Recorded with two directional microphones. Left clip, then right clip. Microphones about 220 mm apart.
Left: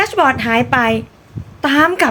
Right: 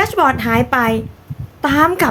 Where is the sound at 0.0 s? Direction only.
5° right (ahead or behind).